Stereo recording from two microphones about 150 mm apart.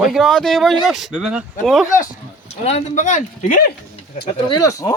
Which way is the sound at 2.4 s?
45° left (ahead or behind).